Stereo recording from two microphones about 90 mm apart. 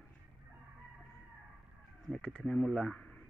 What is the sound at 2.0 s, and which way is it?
Speech, 5° left (ahead or behind).